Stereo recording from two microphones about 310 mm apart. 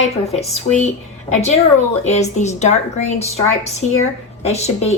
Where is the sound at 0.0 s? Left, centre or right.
Centre.